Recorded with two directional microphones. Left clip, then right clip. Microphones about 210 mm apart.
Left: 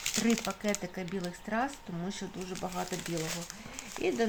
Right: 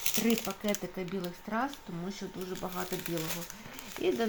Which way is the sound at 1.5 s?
5° left (ahead or behind).